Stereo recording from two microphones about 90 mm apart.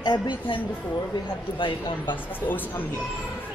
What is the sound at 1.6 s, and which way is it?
Speech, 70° left (ahead or behind).